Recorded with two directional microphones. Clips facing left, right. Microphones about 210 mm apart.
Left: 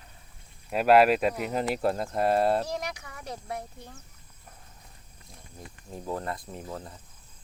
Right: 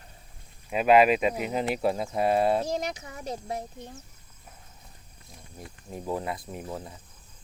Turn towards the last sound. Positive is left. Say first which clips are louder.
# right 2 dB
turn(degrees=-5)  # may be behind; listen again after turning